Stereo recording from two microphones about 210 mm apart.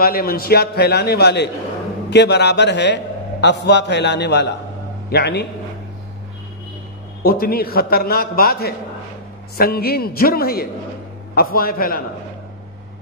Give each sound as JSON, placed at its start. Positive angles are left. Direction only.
{"t": 0.0, "sound": "a man's voice", "side_deg": 45}
{"t": 7.2, "sound": "a man's voice", "side_deg": 45}